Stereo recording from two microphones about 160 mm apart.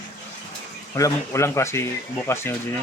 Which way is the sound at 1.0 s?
20° left (ahead or behind).